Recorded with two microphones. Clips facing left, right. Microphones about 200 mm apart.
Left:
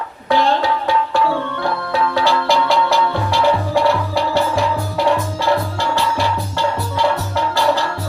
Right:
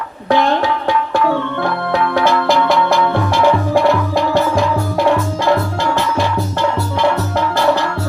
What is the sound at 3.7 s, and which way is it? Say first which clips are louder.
Music: right 3 dB; 15° right (ahead or behind).